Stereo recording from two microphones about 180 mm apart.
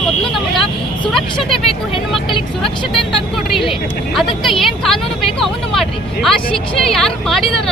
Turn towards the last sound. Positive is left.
turn(degrees=0)  # may be behind; listen again after turning